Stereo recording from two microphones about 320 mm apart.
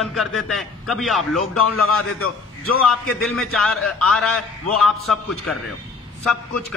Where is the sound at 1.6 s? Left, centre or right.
Left.